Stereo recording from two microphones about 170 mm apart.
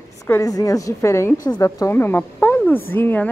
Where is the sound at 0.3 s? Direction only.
20° left (ahead or behind).